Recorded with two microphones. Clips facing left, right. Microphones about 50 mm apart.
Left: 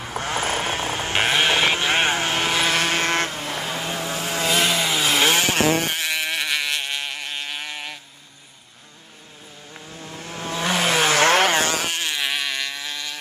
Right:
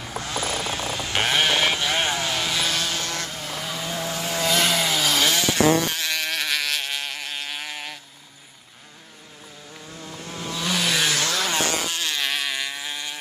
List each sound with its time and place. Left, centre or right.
0.0 s vehicle: left
4.9 s vehicle: left
6.4 s a sound: centre
7.0 s insect: centre
10.0 s vehicle: left
12.4 s vehicle: centre